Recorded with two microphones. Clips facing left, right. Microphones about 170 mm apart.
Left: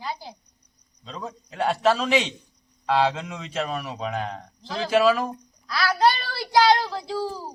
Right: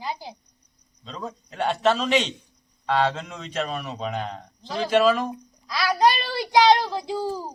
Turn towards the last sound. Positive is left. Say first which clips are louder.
# right 2 dB
turn(degrees=-15)  # may be behind; listen again after turning